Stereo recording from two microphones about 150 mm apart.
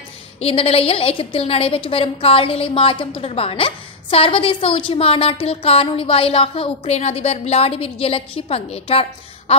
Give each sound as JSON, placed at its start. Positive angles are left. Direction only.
{"t": 0.4, "sound": "a woman's voice", "side_deg": 40}